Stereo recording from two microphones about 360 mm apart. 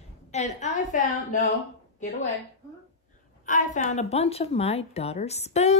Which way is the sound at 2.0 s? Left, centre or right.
Centre.